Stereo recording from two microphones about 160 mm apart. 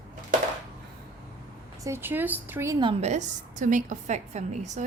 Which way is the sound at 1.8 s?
15° right (ahead or behind).